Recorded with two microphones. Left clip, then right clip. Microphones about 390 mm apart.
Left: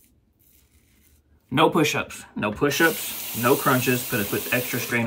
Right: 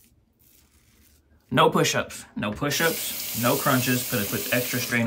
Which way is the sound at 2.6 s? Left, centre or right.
Right.